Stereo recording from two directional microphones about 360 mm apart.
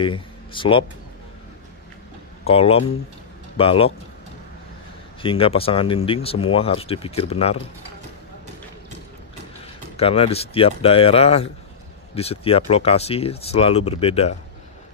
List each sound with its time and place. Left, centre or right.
0.0 s speech: centre
2.4 s speech: centre
5.2 s speech: centre
9.9 s speech: centre